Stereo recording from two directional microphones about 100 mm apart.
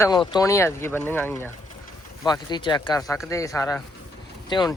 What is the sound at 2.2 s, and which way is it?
Speech, 45° left (ahead or behind).